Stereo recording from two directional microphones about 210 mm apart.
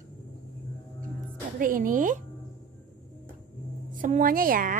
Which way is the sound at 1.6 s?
40° right (ahead or behind).